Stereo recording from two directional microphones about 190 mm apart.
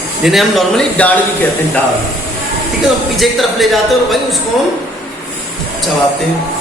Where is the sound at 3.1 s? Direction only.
Centre (ahead or behind).